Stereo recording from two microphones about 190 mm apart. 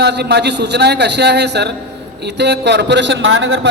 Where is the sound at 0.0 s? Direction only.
60° right (ahead or behind).